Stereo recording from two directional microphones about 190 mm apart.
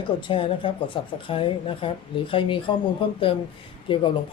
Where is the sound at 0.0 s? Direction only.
25° left (ahead or behind).